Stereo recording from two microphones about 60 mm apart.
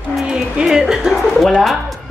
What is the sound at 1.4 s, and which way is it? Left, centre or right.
Speech, centre.